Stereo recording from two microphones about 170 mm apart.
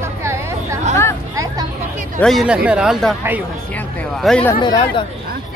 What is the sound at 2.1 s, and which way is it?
Speech, centre (ahead or behind).